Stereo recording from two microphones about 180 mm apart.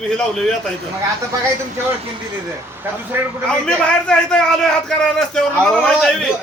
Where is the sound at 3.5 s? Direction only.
5° left (ahead or behind).